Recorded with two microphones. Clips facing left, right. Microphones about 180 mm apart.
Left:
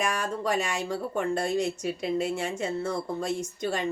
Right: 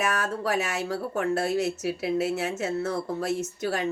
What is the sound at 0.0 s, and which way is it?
Speech, 5° right (ahead or behind).